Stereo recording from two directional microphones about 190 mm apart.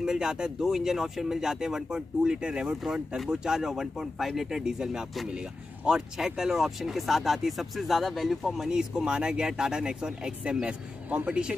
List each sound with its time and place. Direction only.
0.0 s speech: 5° right (ahead or behind)